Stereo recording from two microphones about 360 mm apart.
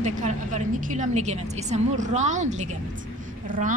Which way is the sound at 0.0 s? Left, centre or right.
Centre.